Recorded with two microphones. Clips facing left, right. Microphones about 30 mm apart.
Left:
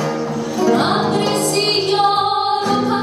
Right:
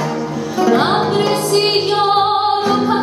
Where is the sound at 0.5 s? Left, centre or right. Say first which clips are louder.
Right 2 dB; right.